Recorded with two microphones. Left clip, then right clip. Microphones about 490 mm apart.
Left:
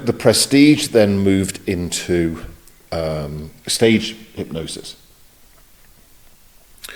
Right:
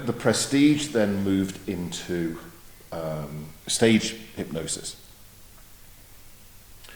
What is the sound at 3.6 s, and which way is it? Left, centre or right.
Speech, centre.